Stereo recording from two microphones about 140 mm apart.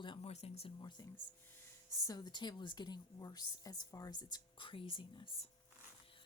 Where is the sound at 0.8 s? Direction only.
30° left (ahead or behind).